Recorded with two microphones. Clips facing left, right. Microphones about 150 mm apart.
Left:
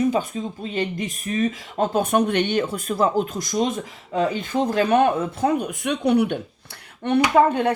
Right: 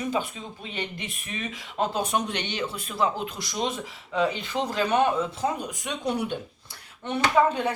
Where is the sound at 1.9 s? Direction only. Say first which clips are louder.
Left 7 dB; 55° left (ahead or behind).